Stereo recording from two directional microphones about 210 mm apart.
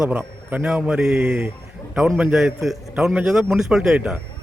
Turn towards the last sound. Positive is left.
turn(degrees=-5)  # may be behind; listen again after turning